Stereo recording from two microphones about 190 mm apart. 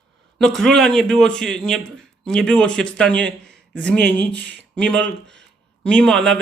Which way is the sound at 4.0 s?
65° right (ahead or behind).